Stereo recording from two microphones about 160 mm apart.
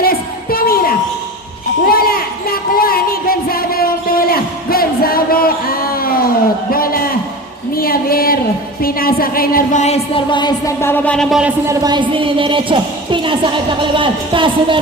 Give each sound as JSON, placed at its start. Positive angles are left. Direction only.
{"t": 0.0, "sound": "music", "side_deg": 70}
{"t": 1.9, "sound": "a sound", "side_deg": 70}
{"t": 8.8, "sound": "a woman's voice", "side_deg": 70}
{"t": 9.8, "sound": "music", "side_deg": 40}
{"t": 10.8, "sound": "speech", "side_deg": 15}
{"t": 11.7, "sound": "a woman's voice", "side_deg": -25}